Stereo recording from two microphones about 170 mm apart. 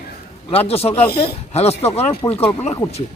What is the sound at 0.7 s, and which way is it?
Speech, 35° left (ahead or behind).